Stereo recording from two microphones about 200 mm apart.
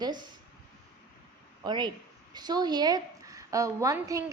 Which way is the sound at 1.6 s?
20° right (ahead or behind).